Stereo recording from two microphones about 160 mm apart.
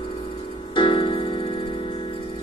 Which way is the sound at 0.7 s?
30° left (ahead or behind).